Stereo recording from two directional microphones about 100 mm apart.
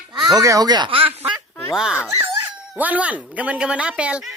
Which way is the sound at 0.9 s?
65° right (ahead or behind).